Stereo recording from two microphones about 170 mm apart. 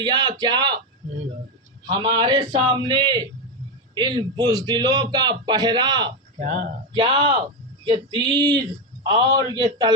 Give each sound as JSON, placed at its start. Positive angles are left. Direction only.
{"t": 0.0, "sound": "a man's voice", "side_deg": -25}
{"t": 1.9, "sound": "a man's voice", "side_deg": -25}
{"t": 6.4, "sound": "speech", "side_deg": -50}
{"t": 6.9, "sound": "a man's voice", "side_deg": -30}